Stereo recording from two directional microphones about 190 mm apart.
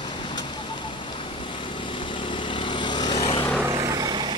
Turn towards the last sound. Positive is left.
turn(degrees=-20)  # may be behind; listen again after turning